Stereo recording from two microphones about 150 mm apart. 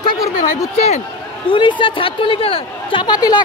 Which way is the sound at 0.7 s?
45° left (ahead or behind).